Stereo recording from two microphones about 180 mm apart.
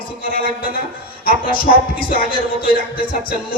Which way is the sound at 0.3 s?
55° right (ahead or behind).